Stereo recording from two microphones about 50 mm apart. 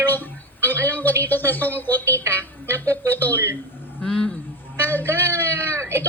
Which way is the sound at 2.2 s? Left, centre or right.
Right.